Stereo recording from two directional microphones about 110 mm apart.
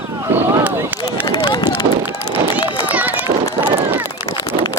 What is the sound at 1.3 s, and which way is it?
Run, 45° left (ahead or behind).